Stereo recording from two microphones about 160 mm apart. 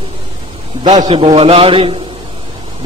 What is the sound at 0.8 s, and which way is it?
A man's voice, 30° right (ahead or behind).